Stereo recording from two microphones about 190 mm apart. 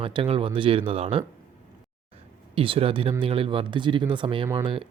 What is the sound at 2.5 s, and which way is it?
Speech, 30° right (ahead or behind).